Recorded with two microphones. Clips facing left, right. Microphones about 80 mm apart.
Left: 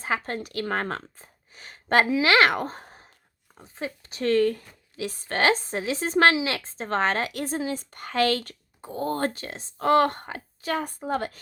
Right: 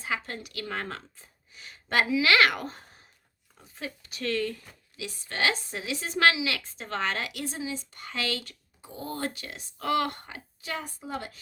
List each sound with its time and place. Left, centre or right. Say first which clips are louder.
0.0 s speech: left 5 dB; left